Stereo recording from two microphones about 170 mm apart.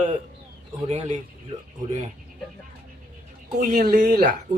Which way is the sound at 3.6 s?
60° right (ahead or behind).